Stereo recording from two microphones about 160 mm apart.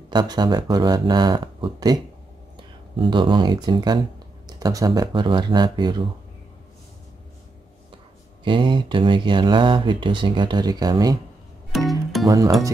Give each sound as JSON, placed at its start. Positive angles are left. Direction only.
{"t": 0.1, "sound": "speech", "side_deg": -25}
{"t": 3.0, "sound": "speech", "side_deg": -30}
{"t": 8.5, "sound": "speech", "side_deg": -30}
{"t": 11.9, "sound": "music", "side_deg": 0}
{"t": 12.3, "sound": "speech", "side_deg": -20}